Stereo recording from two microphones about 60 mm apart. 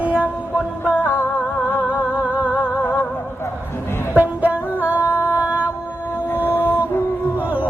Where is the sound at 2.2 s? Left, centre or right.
Right.